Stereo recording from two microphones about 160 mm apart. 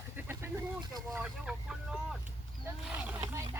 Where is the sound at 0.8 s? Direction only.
25° right (ahead or behind).